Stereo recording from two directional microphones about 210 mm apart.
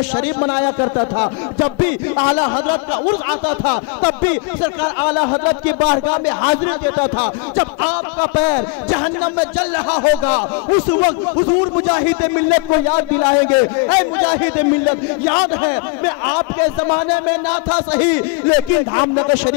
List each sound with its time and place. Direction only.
0.1 s speech: 15° left (ahead or behind)
10.2 s speech: 15° left (ahead or behind)